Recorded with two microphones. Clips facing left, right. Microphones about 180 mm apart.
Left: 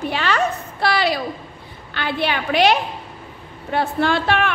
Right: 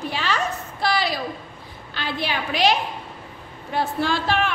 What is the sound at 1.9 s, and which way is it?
A woman's voice, 60° left (ahead or behind).